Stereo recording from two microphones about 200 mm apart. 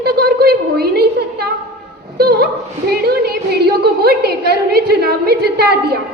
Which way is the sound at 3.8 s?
50° right (ahead or behind).